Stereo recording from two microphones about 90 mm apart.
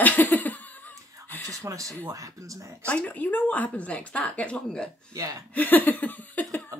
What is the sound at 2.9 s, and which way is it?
Speech, 15° left (ahead or behind).